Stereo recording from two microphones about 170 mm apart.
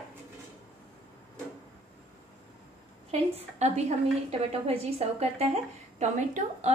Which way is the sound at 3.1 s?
40° right (ahead or behind).